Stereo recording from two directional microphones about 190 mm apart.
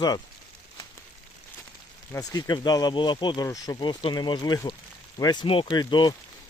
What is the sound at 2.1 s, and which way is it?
Speech, 20° left (ahead or behind).